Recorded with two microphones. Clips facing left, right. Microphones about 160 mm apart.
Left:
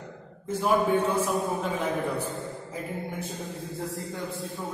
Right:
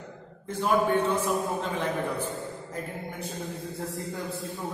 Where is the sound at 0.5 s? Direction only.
10° left (ahead or behind).